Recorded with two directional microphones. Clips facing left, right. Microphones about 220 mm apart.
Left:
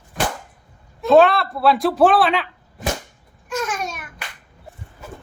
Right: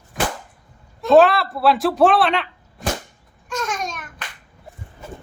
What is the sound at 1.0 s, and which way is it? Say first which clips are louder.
Speech: even; centre (ahead or behind).